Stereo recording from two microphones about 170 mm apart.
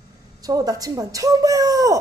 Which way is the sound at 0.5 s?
20° right (ahead or behind).